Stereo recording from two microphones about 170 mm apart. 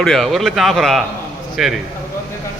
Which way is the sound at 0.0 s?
Centre (ahead or behind).